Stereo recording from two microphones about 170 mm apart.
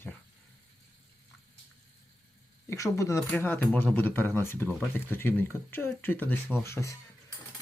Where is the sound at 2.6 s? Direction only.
20° left (ahead or behind).